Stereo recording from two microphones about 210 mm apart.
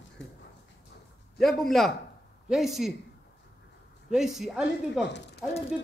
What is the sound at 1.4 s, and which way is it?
A woman's voice, centre (ahead or behind).